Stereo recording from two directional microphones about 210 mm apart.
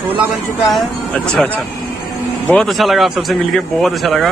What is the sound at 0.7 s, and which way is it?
Speech, centre (ahead or behind).